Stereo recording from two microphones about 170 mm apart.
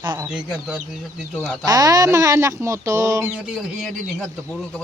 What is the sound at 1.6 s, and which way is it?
Speech, 20° right (ahead or behind).